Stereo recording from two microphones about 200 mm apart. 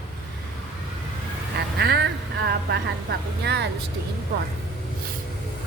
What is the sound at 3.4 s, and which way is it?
Speech, 55° right (ahead or behind).